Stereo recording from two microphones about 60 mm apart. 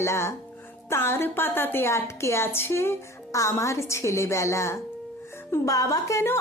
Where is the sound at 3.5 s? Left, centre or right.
Left.